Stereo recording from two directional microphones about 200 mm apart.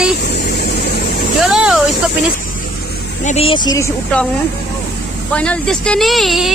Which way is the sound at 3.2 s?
30° left (ahead or behind).